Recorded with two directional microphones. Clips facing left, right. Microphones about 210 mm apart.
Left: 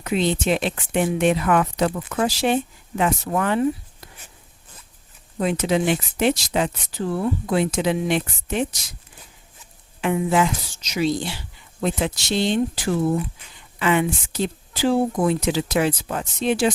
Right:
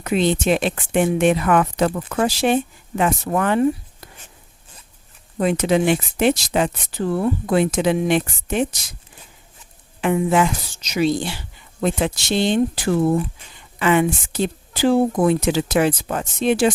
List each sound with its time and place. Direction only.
0.0 s speech: 55° right (ahead or behind)
5.4 s speech: 55° right (ahead or behind)
10.0 s speech: 50° right (ahead or behind)